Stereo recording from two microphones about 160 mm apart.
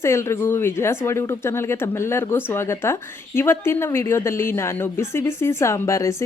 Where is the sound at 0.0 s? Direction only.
15° left (ahead or behind).